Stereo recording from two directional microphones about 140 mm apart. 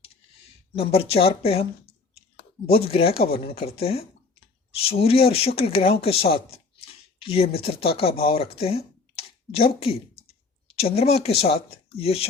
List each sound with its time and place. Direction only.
0.8 s speech: 45° left (ahead or behind)
9.1 s a sound: 45° left (ahead or behind)
10.8 s speech: 45° left (ahead or behind)